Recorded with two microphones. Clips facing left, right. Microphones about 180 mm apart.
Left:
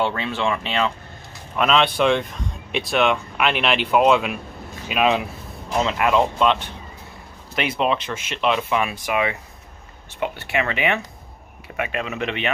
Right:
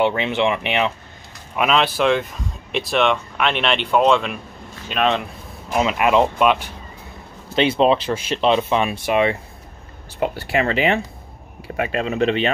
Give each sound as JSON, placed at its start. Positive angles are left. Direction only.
{"t": 0.0, "sound": "speech", "side_deg": -20}
{"t": 1.6, "sound": "speech", "side_deg": -5}
{"t": 4.8, "sound": "a sound", "side_deg": 5}
{"t": 5.8, "sound": "speech", "side_deg": -15}
{"t": 7.5, "sound": "speech", "side_deg": -30}